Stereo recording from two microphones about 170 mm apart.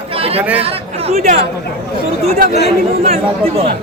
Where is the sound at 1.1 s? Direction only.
50° right (ahead or behind).